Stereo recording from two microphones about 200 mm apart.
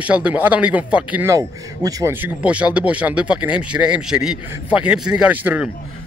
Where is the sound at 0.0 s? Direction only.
5° right (ahead or behind).